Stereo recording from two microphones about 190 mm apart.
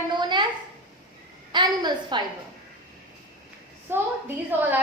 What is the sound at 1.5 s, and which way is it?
Speech, 25° right (ahead or behind).